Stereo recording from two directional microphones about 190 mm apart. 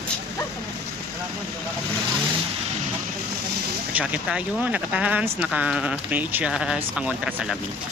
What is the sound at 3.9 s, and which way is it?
Speech, 5° right (ahead or behind).